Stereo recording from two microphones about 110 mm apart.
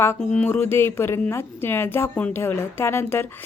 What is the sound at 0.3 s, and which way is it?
Speech, 20° left (ahead or behind).